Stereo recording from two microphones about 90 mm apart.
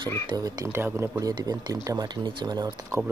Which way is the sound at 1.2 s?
50° right (ahead or behind).